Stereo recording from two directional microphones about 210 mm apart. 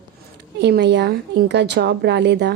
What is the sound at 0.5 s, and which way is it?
Speech, 55° right (ahead or behind).